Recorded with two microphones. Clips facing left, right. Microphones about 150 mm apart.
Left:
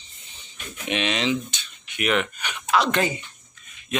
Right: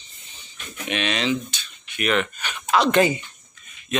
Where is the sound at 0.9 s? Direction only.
20° left (ahead or behind).